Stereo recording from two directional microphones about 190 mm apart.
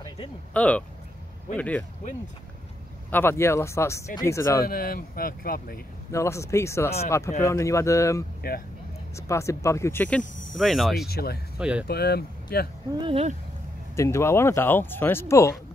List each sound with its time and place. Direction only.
0.5 s speech: 5° left (ahead or behind)
3.1 s speech: 10° left (ahead or behind)
4.6 s speech: 50° left (ahead or behind)
6.1 s speech: 15° left (ahead or behind)
8.4 s speech: 55° left (ahead or behind)
9.1 s speech: 15° left (ahead or behind); by 11.1 s centre (ahead or behind)
11.1 s speech: 55° left (ahead or behind)
11.5 s speech: 5° right (ahead or behind)
11.9 s speech: 55° left (ahead or behind)
13.0 s speech: 35° right (ahead or behind)
13.9 s speech: 15° left (ahead or behind)